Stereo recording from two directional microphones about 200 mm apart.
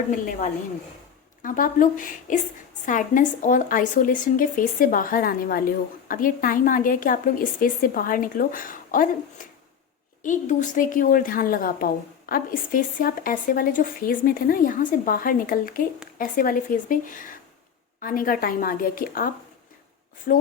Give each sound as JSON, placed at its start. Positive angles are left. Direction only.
{"t": 0.1, "sound": "a woman's voice", "side_deg": 40}